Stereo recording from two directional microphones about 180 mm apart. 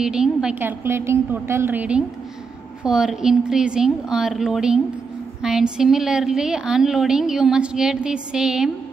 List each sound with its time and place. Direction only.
0.0 s a woman's voice: 5° right (ahead or behind)